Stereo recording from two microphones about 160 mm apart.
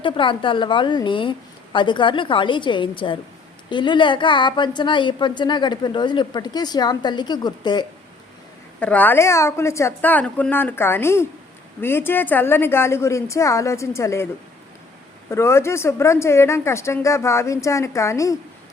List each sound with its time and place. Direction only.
0.0 s a woman's voice: 30° left (ahead or behind)
8.8 s a woman's voice: 10° left (ahead or behind)
15.3 s a woman's voice: 15° left (ahead or behind)